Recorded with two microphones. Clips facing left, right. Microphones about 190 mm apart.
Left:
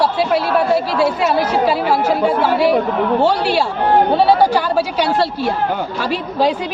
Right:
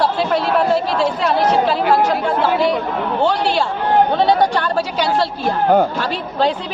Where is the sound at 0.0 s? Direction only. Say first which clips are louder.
Left 1 dB; 5° left (ahead or behind).